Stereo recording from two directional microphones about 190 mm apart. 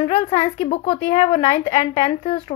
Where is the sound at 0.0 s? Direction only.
30° left (ahead or behind).